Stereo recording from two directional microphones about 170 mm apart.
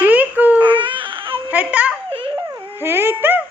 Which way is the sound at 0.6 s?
30° right (ahead or behind).